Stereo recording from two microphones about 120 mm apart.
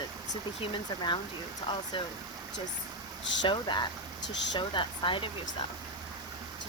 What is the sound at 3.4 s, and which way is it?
Speech, 40° left (ahead or behind).